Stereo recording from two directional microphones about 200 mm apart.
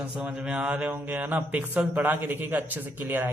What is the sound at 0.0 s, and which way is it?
A man's voice, 5° right (ahead or behind).